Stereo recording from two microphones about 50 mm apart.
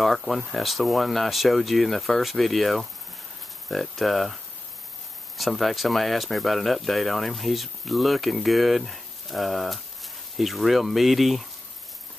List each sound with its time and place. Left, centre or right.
0.5 s speech: centre
5.4 s speech: centre